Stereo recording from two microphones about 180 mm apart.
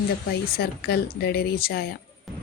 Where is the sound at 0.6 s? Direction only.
60° left (ahead or behind).